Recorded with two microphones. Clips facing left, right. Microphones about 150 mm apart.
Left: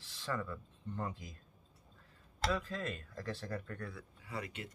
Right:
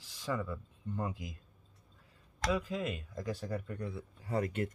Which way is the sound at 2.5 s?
15° right (ahead or behind).